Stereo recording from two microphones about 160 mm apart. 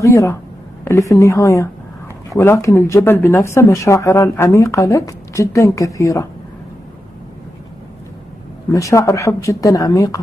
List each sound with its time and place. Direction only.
0.0 s speech: 20° left (ahead or behind)
8.7 s speech: 20° left (ahead or behind)